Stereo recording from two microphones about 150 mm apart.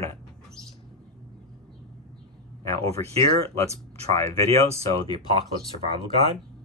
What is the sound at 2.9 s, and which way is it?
Speech, 20° left (ahead or behind).